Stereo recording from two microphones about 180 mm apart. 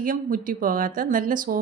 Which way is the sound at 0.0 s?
50° right (ahead or behind).